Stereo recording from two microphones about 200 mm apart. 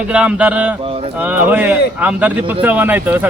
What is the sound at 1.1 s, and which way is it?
Speech, 10° right (ahead or behind).